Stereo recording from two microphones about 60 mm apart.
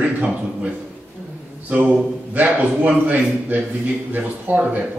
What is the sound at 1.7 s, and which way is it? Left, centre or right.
Speech, right.